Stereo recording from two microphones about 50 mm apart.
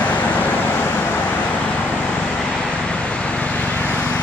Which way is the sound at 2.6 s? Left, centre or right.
Left.